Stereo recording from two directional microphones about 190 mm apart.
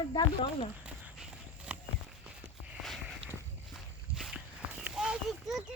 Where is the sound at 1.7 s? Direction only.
5° right (ahead or behind).